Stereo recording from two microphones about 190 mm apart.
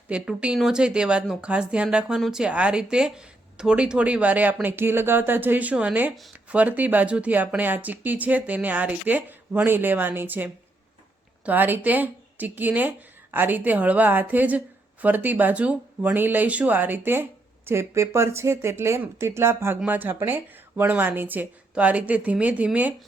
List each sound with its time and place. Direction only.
0.1 s speech: 5° right (ahead or behind)